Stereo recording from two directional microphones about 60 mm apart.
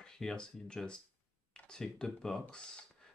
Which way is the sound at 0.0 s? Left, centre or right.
Centre.